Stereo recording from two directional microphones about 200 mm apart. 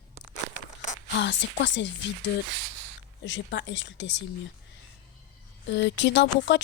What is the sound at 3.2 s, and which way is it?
Speech, 65° left (ahead or behind).